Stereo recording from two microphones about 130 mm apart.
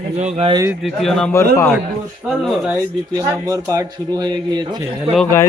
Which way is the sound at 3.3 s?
25° right (ahead or behind).